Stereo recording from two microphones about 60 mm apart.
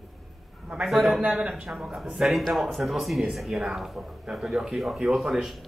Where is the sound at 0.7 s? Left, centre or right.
Centre.